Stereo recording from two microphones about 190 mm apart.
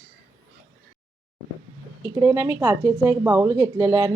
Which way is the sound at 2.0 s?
15° right (ahead or behind).